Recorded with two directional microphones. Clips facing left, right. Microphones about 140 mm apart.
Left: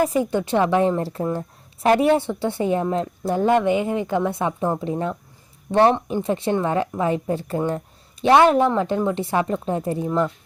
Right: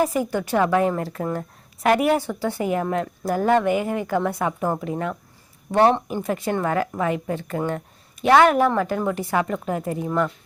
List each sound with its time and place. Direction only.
0.1 s speech: 25° left (ahead or behind)
6.1 s a woman's voice: 25° left (ahead or behind)